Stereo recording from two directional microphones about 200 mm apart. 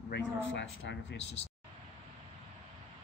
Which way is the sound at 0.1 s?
65° left (ahead or behind).